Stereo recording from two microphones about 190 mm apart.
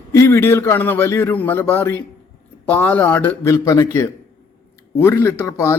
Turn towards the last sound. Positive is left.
turn(degrees=15)  # may be behind; listen again after turning